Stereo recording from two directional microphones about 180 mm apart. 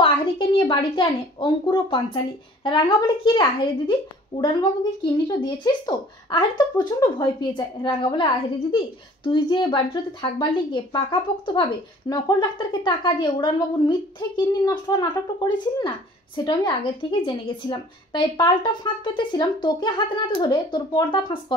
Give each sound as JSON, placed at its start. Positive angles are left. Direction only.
{"t": 0.0, "sound": "a woman's voice", "side_deg": 30}